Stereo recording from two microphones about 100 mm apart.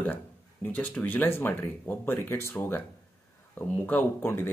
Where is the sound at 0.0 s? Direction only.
20° left (ahead or behind).